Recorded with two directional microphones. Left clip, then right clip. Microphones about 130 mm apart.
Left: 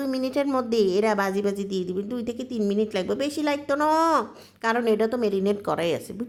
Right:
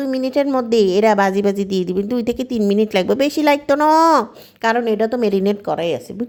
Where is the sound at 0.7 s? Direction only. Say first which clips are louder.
Right 9 dB; 35° right (ahead or behind).